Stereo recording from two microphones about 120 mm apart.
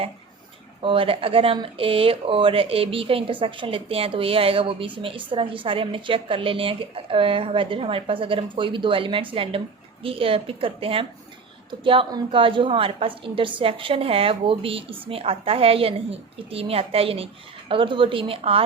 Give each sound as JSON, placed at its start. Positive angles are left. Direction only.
{"t": 0.8, "sound": "speech", "side_deg": -50}